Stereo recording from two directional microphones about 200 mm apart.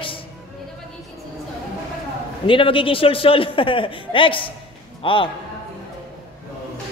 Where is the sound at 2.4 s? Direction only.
25° left (ahead or behind).